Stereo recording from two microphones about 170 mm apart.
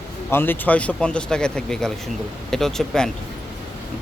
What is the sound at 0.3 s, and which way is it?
Speech, 15° left (ahead or behind).